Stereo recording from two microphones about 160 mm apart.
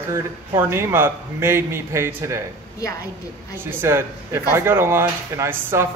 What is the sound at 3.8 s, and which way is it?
Speech, 15° right (ahead or behind).